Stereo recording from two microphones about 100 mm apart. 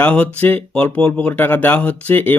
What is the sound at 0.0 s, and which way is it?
Speech, 15° left (ahead or behind).